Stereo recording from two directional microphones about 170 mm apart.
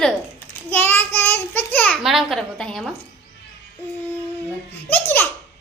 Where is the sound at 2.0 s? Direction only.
Centre (ahead or behind).